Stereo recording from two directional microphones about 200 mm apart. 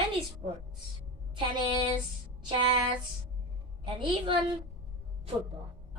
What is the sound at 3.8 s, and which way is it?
Speech, 25° right (ahead or behind).